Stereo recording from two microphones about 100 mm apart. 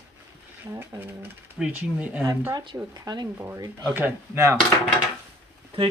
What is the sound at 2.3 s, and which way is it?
Speech, 35° right (ahead or behind).